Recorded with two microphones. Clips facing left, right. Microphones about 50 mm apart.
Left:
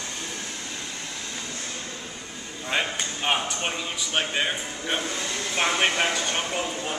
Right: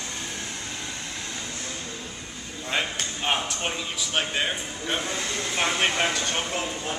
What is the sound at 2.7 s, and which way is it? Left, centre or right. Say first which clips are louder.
Speech: left 1 dB; centre.